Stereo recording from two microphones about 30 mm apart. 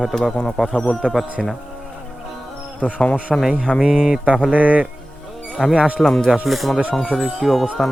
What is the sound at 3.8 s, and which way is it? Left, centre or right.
Speech, centre.